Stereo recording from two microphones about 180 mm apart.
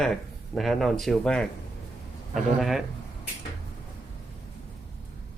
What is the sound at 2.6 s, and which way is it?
Speech, centre (ahead or behind).